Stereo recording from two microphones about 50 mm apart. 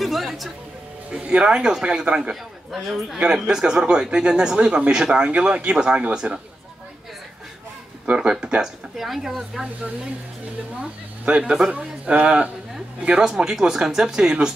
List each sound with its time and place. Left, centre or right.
0.0 s music: centre
1.2 s speech: right
2.7 s speech: centre
3.4 s speech: centre
8.1 s speech: centre
8.9 s speech: centre
10.8 s speech: right